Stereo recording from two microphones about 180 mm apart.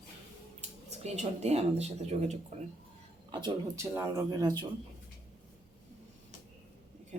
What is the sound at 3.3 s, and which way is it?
Speech, 25° right (ahead or behind).